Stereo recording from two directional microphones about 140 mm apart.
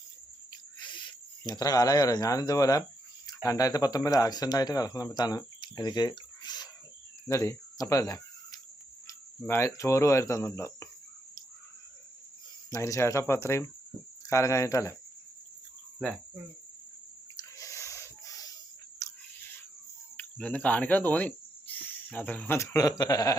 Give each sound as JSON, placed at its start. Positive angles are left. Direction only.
{"t": 0.8, "sound": "speech", "side_deg": 35}
{"t": 7.3, "sound": "cricket", "side_deg": 20}
{"t": 9.0, "sound": "speech", "side_deg": 20}
{"t": 12.7, "sound": "speech", "side_deg": 20}
{"t": 17.3, "sound": "a sound", "side_deg": 20}
{"t": 20.1, "sound": "cricket", "side_deg": 10}
{"t": 21.8, "sound": "speech", "side_deg": 10}